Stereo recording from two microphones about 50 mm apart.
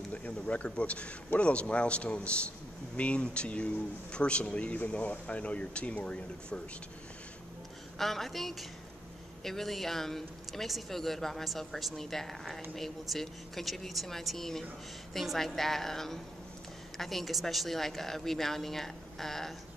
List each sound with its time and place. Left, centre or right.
0.1 s a man's voice: left
8.0 s a woman's voice: centre